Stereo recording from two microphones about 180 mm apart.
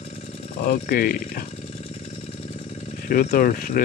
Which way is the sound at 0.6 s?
55° left (ahead or behind).